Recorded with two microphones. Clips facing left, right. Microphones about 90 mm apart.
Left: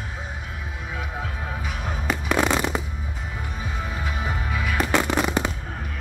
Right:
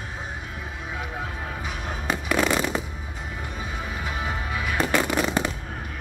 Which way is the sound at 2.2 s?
20° left (ahead or behind).